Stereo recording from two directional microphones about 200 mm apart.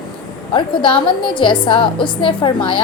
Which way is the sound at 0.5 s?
25° left (ahead or behind).